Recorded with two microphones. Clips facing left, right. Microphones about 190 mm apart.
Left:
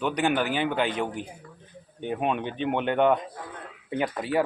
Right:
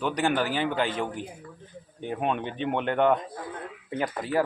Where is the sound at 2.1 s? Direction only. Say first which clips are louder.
Left 1 dB; 10° left (ahead or behind).